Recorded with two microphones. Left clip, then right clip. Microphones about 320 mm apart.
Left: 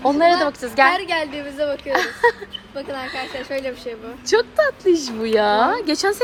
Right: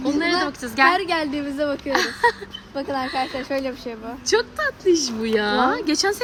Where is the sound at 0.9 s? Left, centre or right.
Right.